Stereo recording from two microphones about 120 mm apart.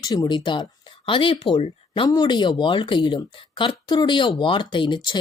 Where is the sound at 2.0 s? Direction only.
35° left (ahead or behind).